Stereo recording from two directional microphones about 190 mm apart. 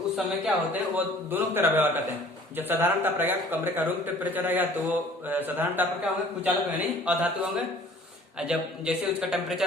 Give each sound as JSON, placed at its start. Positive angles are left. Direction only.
{"t": 0.2, "sound": "a man's voice", "side_deg": -5}